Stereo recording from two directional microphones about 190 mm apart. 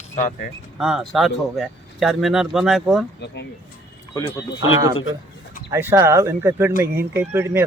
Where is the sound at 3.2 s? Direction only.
60° left (ahead or behind).